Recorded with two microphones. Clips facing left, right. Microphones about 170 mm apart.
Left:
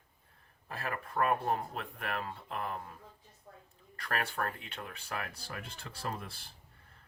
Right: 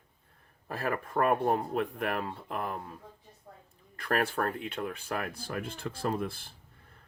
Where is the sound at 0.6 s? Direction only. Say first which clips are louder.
Right 6 dB; 40° right (ahead or behind).